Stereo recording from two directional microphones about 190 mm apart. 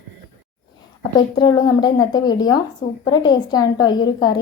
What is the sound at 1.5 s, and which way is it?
A woman's voice, 20° left (ahead or behind).